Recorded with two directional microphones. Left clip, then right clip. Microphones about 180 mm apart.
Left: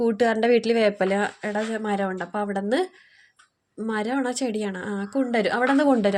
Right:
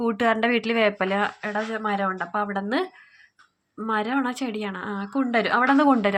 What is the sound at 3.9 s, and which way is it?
Speech, 50° left (ahead or behind).